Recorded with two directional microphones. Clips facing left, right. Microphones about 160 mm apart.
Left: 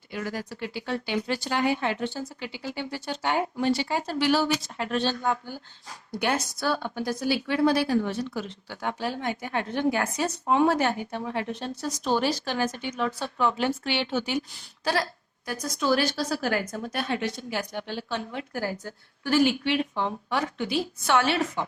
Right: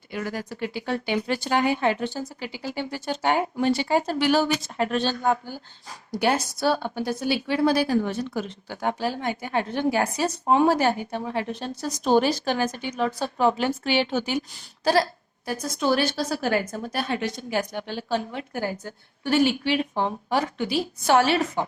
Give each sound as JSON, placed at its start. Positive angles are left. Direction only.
{"t": 0.1, "sound": "speech", "side_deg": -55}
{"t": 6.1, "sound": "speech", "side_deg": -35}
{"t": 15.4, "sound": "a woman's voice", "side_deg": -30}
{"t": 19.6, "sound": "speech", "side_deg": -40}